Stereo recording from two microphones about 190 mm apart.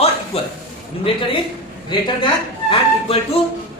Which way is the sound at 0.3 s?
30° left (ahead or behind).